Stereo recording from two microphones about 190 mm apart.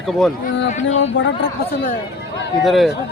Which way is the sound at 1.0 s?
70° left (ahead or behind).